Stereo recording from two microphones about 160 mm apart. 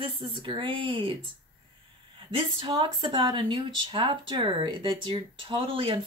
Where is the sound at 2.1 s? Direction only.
30° right (ahead or behind).